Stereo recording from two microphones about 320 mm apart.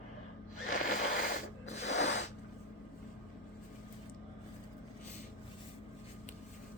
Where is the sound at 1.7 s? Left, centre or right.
Left.